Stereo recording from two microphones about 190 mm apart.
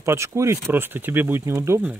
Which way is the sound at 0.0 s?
15° right (ahead or behind).